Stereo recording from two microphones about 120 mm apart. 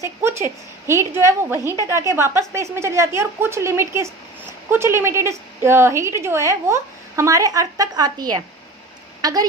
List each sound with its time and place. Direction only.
0.0 s a woman's voice: 20° right (ahead or behind)